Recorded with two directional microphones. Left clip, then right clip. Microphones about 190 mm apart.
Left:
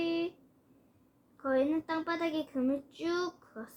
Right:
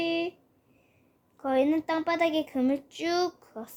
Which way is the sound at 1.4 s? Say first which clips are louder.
Right 5 dB; 45° right (ahead or behind).